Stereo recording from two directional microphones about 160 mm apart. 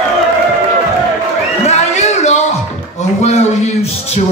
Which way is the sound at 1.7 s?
45° left (ahead or behind).